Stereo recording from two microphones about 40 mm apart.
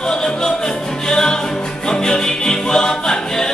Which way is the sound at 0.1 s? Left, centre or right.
Centre.